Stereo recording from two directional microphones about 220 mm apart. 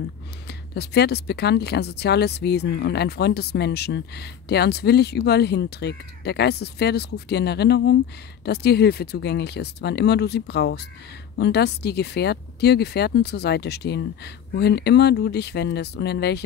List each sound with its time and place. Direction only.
0.5 s speech: 50° left (ahead or behind)